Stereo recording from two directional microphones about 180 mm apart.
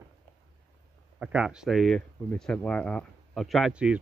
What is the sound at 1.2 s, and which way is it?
A man's voice, 5° right (ahead or behind).